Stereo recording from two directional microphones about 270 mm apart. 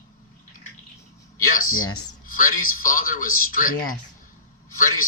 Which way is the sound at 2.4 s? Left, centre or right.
Left.